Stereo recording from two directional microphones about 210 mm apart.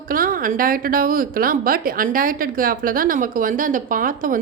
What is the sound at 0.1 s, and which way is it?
A woman's voice, 40° right (ahead or behind).